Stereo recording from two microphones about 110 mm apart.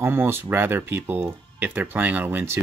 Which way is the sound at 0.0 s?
20° right (ahead or behind).